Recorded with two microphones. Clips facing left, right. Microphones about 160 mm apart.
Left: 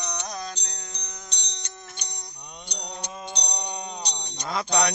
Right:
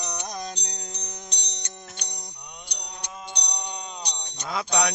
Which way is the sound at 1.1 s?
35° right (ahead or behind).